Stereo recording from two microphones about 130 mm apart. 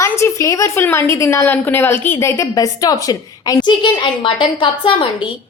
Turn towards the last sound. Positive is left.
turn(degrees=40)  # may be behind; listen again after turning